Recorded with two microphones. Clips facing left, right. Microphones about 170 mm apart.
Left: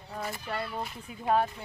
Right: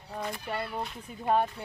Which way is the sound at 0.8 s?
Centre (ahead or behind).